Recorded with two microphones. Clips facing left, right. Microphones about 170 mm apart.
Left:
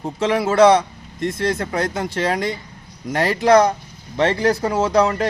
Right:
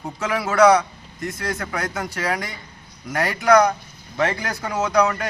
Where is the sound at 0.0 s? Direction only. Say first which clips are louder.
Left 6 dB; 30° left (ahead or behind).